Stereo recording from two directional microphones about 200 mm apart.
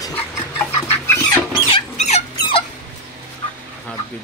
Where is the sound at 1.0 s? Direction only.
10° left (ahead or behind).